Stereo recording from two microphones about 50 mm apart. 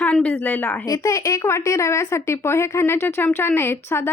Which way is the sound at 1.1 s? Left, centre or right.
Left.